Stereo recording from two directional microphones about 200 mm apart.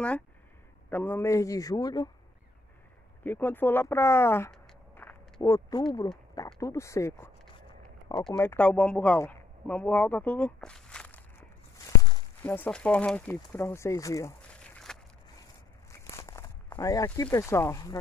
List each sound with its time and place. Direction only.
0.8 s speech: 10° left (ahead or behind)
3.3 s speech: 10° left (ahead or behind)
8.4 s speech: 10° left (ahead or behind)
12.0 s walk: 20° left (ahead or behind)
12.4 s speech: 10° left (ahead or behind)
14.9 s a sound: 5° left (ahead or behind)
16.2 s speech: 15° left (ahead or behind)